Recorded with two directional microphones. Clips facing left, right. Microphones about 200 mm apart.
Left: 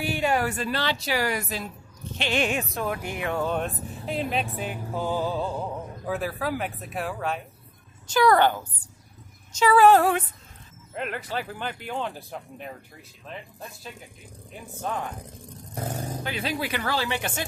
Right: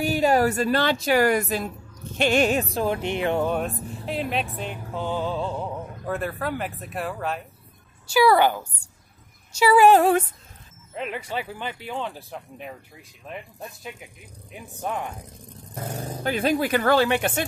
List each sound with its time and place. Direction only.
0.0 s speech: 40° right (ahead or behind)
3.6 s speech: centre (ahead or behind)
11.1 s speech: 10° right (ahead or behind)
11.5 s speech: 5° left (ahead or behind)
14.7 s speech: 15° right (ahead or behind)
16.2 s speech: 50° right (ahead or behind)